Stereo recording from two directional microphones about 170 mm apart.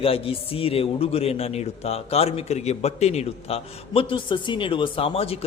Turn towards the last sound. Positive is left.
turn(degrees=35)  # may be behind; listen again after turning